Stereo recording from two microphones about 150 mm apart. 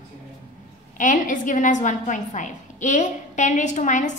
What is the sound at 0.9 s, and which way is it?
A woman's voice, 60° left (ahead or behind).